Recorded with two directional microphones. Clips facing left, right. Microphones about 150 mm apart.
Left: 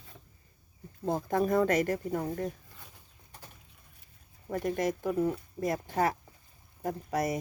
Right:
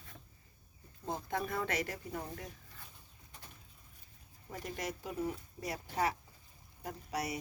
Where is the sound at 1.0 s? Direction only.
45° left (ahead or behind).